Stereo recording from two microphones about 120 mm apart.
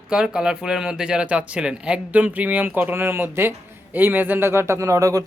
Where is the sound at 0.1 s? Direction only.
5° right (ahead or behind).